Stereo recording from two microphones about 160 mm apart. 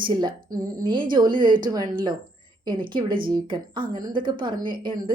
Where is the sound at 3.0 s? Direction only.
60° right (ahead or behind).